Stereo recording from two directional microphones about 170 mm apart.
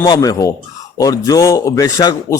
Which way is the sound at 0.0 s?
20° left (ahead or behind).